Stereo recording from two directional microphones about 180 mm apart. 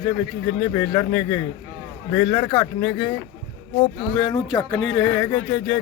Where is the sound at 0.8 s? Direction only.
25° left (ahead or behind).